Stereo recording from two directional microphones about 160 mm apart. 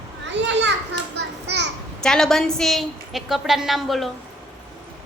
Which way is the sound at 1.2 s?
90° right.